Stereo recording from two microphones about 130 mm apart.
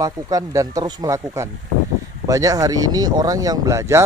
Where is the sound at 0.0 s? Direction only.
25° right (ahead or behind).